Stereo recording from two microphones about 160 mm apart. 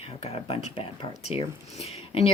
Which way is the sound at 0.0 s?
40° left (ahead or behind).